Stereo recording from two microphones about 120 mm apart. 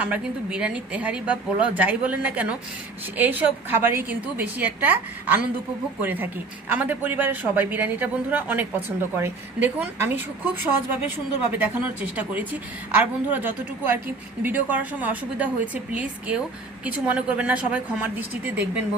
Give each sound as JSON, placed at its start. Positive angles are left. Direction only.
{"t": 0.0, "sound": "a woman's voice", "side_deg": -10}